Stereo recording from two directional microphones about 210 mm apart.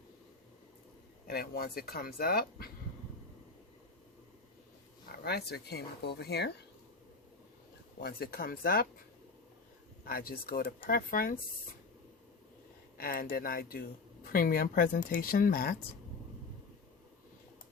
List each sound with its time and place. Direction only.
1.3 s speech: 45° left (ahead or behind)
5.1 s a sound: 50° left (ahead or behind)
5.5 s speech: 50° left (ahead or behind)
8.0 s speech: 45° left (ahead or behind)
10.0 s speech: 45° left (ahead or behind)
13.0 s speech: 45° left (ahead or behind)